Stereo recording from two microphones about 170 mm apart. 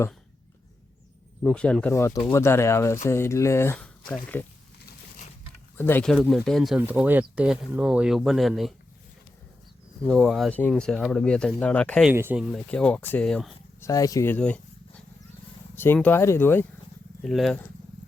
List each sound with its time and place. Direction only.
1.5 s speech: 5° left (ahead or behind)
5.7 s speech: 10° left (ahead or behind)
10.0 s speech: centre (ahead or behind)
12.1 s speech: 10° right (ahead or behind); by 13.5 s 5° left (ahead or behind)
13.8 s speech: 20° left (ahead or behind)
17.2 s speech: centre (ahead or behind)